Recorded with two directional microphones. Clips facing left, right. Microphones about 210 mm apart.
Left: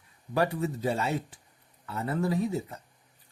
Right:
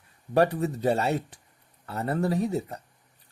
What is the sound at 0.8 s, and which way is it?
Speech, 65° right (ahead or behind).